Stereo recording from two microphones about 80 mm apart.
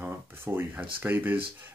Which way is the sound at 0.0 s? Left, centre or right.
Right.